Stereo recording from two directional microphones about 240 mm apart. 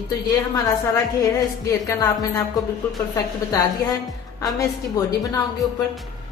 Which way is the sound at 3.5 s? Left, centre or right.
Centre.